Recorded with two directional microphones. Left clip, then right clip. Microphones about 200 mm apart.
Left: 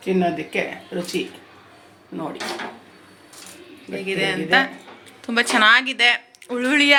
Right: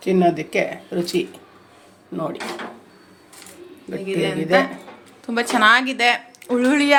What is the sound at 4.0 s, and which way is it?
Speech, 5° left (ahead or behind).